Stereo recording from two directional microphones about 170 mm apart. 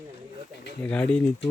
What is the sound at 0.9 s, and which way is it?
Speech, 5° left (ahead or behind).